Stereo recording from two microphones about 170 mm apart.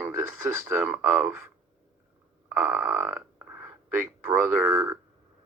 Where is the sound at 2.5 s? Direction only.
10° right (ahead or behind).